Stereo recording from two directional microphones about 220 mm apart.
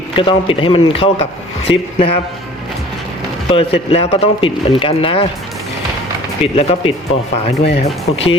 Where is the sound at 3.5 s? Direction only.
25° left (ahead or behind).